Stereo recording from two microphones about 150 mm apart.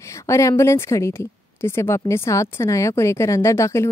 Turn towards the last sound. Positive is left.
turn(degrees=20)  # may be behind; listen again after turning